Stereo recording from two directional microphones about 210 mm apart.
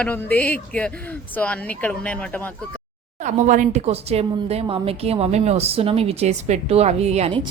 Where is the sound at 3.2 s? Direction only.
35° right (ahead or behind).